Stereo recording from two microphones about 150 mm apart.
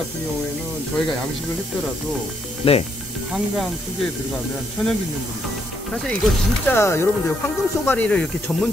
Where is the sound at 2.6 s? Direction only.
40° left (ahead or behind).